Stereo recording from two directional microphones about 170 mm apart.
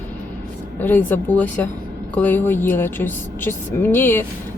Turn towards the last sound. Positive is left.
turn(degrees=15)  # may be behind; listen again after turning